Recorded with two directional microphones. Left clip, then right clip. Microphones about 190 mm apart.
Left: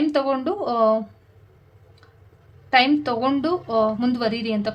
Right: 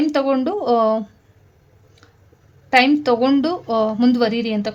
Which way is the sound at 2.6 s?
35° right (ahead or behind).